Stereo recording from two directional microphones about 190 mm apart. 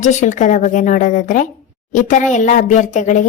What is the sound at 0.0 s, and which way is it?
A woman's voice, 40° left (ahead or behind).